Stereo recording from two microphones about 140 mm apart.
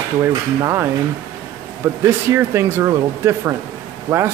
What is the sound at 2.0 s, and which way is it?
Speech, 20° right (ahead or behind).